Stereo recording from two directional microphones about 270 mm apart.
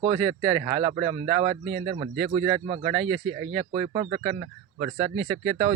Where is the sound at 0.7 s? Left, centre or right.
Centre.